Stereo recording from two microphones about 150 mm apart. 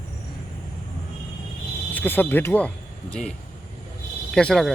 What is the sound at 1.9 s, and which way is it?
Speech, 10° left (ahead or behind).